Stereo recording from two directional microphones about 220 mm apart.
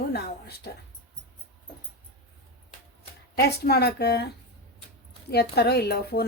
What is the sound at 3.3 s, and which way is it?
A woman's voice, 45° left (ahead or behind).